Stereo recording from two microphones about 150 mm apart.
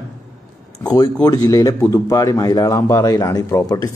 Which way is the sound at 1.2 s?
25° left (ahead or behind).